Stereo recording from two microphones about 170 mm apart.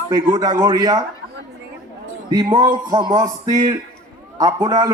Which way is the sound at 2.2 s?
25° right (ahead or behind).